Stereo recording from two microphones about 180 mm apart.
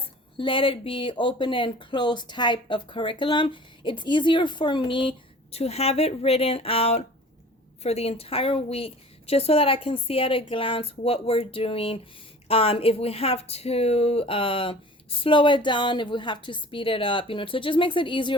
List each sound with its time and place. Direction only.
0.3 s a woman's voice: 30° left (ahead or behind)